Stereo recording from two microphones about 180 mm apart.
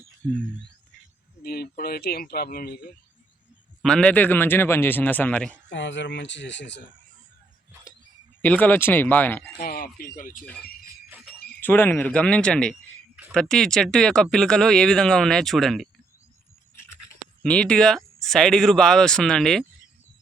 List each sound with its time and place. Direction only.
0.2 s speech: 5° left (ahead or behind)
1.5 s speech: 60° left (ahead or behind)
3.8 s a man's voice: 5° left (ahead or behind)
5.6 s speech: 85° left
8.4 s a man's voice: 10° left (ahead or behind)
9.6 s speech: 55° left (ahead or behind)
11.6 s a man's voice: 10° left (ahead or behind)
17.4 s speech: 5° left (ahead or behind)